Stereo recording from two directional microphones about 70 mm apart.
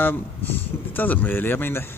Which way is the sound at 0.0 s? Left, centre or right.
Left.